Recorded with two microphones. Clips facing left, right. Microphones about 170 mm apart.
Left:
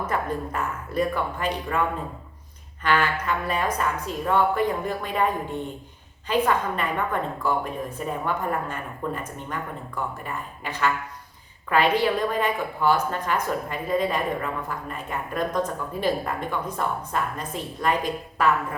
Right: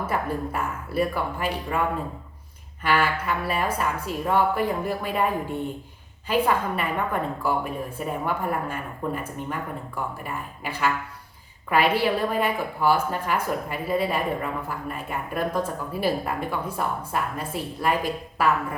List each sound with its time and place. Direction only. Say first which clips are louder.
0.0 s a woman's voice: even; 10° right (ahead or behind)
2.8 s a woman's voice: even; 10° right (ahead or behind)